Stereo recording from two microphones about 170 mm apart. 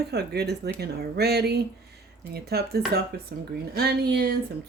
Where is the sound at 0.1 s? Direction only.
70° right (ahead or behind).